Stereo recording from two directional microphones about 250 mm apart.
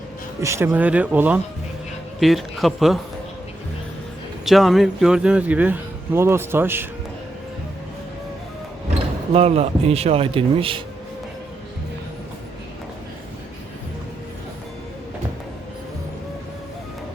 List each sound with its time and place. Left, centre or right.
0.4 s a man's voice: centre
4.4 s a man's voice: centre
9.3 s a man's voice: right